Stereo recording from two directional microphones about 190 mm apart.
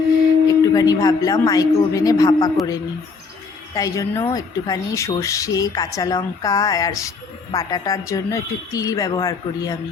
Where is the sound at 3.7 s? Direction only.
15° left (ahead or behind).